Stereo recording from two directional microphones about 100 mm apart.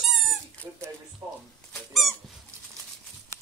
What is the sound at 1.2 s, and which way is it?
Speech, 30° right (ahead or behind).